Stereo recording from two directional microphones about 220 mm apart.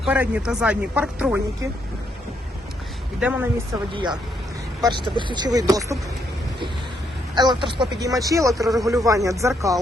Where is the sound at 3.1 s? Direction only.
5° right (ahead or behind).